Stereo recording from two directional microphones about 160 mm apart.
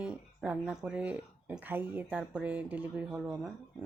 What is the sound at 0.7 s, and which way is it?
Speech, 5° right (ahead or behind).